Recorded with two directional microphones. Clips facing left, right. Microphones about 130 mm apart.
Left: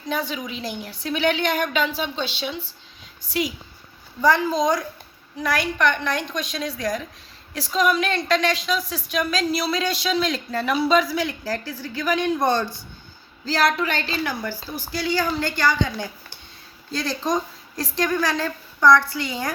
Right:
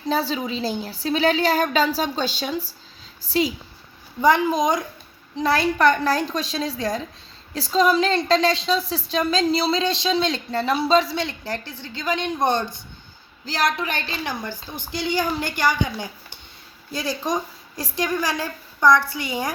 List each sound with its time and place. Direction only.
0.1 s a woman's voice: 30° right (ahead or behind)
4.2 s a woman's voice: 15° right (ahead or behind)
5.4 s a woman's voice: 30° right (ahead or behind); by 19.5 s 15° right (ahead or behind)